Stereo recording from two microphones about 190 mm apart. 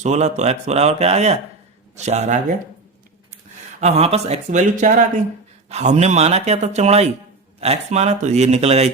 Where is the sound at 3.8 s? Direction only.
35° right (ahead or behind).